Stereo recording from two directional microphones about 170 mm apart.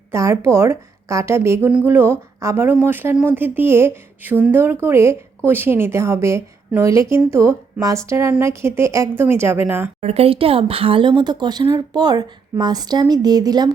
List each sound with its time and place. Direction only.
0.1 s a woman's voice: 15° right (ahead or behind)
10.0 s speech: 35° right (ahead or behind)